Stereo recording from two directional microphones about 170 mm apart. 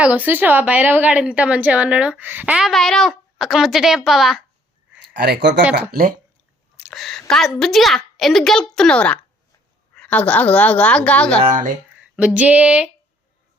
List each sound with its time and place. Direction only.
0.0 s a woman's voice: 10° right (ahead or behind)
5.1 s speech: 75° right (ahead or behind)
5.9 s speech: 55° right (ahead or behind)
6.9 s a woman's voice: centre (ahead or behind)
11.4 s speech: 50° right (ahead or behind)
12.1 s a woman's voice: 5° right (ahead or behind)